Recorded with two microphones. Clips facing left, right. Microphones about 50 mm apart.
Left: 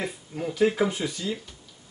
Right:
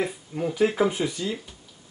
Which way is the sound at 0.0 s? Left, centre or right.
Centre.